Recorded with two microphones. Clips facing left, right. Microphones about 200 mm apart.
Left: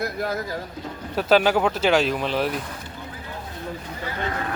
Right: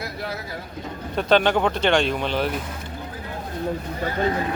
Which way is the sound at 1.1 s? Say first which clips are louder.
Even; 5° left (ahead or behind).